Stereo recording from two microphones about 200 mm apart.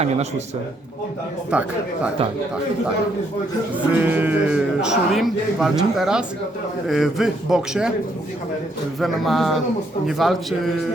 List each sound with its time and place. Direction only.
0.0 s a man's voice: 35° right (ahead or behind)
1.5 s speech: 5° right (ahead or behind)
4.0 s speech: 10° right (ahead or behind)
9.0 s speech: centre (ahead or behind)